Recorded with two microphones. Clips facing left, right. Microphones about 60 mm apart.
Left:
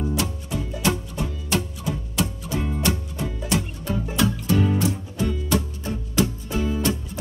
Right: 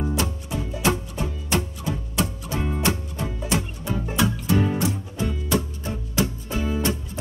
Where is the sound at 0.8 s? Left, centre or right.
Right.